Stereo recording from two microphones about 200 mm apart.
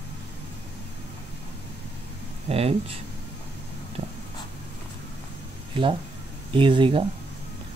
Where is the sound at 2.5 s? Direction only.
30° right (ahead or behind).